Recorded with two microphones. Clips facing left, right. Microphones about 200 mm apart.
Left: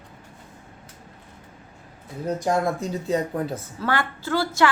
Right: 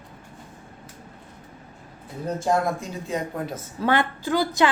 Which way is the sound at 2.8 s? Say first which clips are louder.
Left 5 dB; 30° left (ahead or behind).